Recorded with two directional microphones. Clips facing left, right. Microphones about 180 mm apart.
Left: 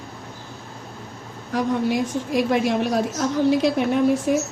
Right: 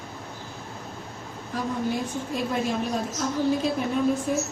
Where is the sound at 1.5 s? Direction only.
80° left.